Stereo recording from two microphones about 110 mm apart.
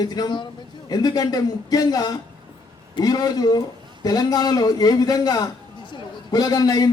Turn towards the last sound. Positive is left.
turn(degrees=35)  # may be behind; listen again after turning